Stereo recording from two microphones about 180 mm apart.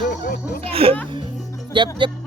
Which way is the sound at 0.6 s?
30° right (ahead or behind).